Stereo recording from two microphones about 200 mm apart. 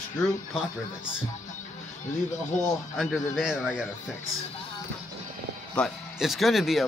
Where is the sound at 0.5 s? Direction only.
5° right (ahead or behind).